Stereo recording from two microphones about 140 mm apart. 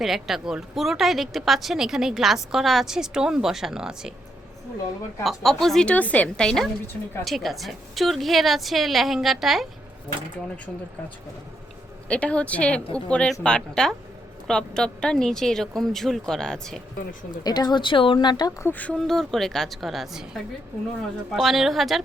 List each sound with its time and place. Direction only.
0.0 s a woman's voice: centre (ahead or behind)
5.2 s a woman's voice: centre (ahead or behind)
12.0 s a woman's voice: 10° left (ahead or behind)
17.4 s a woman's voice: 30° left (ahead or behind)
18.6 s a woman's voice: 10° left (ahead or behind)